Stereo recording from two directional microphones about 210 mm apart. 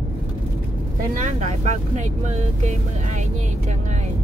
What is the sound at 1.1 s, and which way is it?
Speech, 35° right (ahead or behind).